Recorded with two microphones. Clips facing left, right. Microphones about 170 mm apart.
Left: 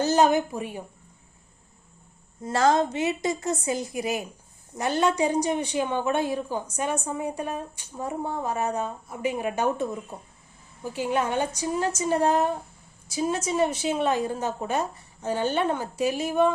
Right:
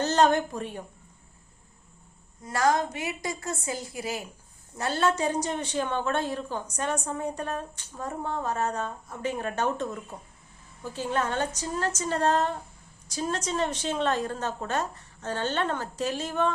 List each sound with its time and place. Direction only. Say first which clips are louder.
0.0 s a woman's voice: left 2 dB; 10° left (ahead or behind)
2.4 s a woman's voice: left 3 dB; 25° left (ahead or behind); by 16.5 s 10° left (ahead or behind)